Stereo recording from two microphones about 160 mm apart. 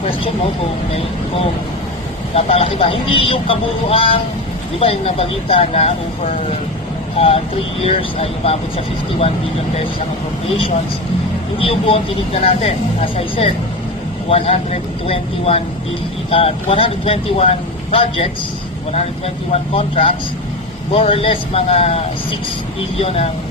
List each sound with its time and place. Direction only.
2.3 s speech: 35° left (ahead or behind)
11.6 s speech: 35° left (ahead or behind)
19.5 s speech: 35° left (ahead or behind)